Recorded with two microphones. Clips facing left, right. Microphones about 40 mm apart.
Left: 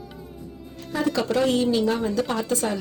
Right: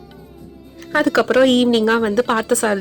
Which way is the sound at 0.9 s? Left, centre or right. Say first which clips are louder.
Right 8 dB; right.